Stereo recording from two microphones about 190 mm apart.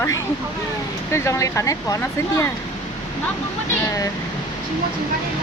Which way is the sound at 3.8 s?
15° left (ahead or behind).